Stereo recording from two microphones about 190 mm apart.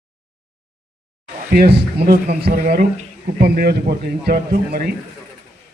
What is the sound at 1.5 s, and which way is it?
A man's voice, 50° right (ahead or behind).